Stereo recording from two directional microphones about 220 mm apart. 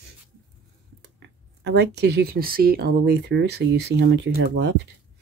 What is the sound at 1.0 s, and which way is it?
Speech, 50° right (ahead or behind).